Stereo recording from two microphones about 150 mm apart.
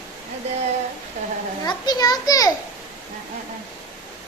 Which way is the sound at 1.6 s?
25° left (ahead or behind).